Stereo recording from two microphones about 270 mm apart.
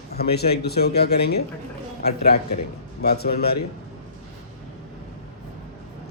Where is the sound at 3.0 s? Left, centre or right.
Left.